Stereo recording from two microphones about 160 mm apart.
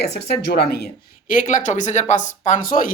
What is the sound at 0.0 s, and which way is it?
Speech, 90° left.